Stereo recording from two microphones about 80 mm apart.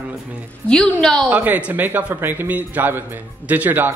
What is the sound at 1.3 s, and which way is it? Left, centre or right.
A man's voice, right.